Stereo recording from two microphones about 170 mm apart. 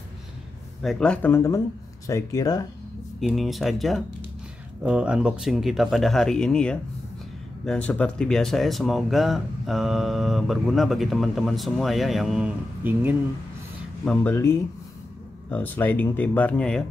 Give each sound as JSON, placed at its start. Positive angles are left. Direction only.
{"t": 0.8, "sound": "speech", "side_deg": 5}
{"t": 3.2, "sound": "speech", "side_deg": 0}
{"t": 14.0, "sound": "speech", "side_deg": 5}